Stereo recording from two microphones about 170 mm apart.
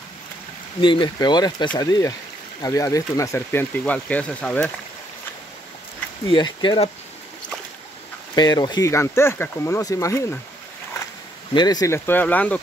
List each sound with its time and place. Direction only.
0.7 s speech: 30° left (ahead or behind); by 4.6 s 10° left (ahead or behind)
6.2 s speech: 30° left (ahead or behind)
8.4 s speech: 25° left (ahead or behind)
11.5 s speech: 25° left (ahead or behind)